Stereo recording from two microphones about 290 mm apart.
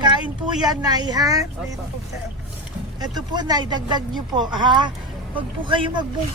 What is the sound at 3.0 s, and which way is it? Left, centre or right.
Speech, centre.